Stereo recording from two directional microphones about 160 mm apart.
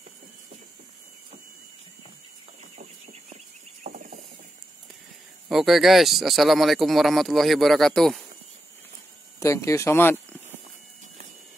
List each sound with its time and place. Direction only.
3.8 s a sound: 55° right (ahead or behind)
5.5 s speech: centre (ahead or behind)
9.4 s speech: 20° left (ahead or behind)